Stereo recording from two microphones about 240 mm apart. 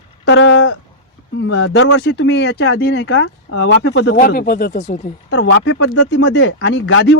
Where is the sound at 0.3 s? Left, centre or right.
Left.